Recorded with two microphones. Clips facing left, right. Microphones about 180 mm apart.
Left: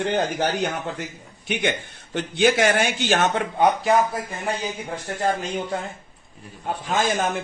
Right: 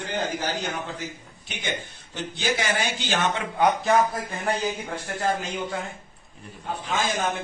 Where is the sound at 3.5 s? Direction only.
15° left (ahead or behind).